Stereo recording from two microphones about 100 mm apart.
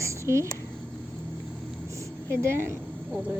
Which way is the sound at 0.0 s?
30° right (ahead or behind).